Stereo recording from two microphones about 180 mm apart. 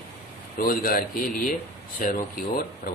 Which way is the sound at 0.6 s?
50° left (ahead or behind).